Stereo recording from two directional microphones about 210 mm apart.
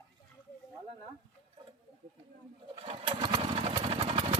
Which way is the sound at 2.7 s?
25° right (ahead or behind).